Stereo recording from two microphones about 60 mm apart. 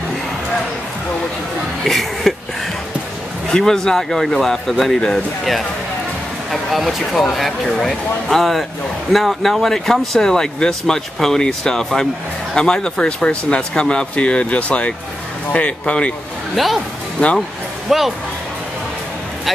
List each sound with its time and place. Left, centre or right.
1.9 s a sound: centre
3.4 s speech: centre
6.5 s speech: centre
16.5 s speech: centre
17.8 s speech: centre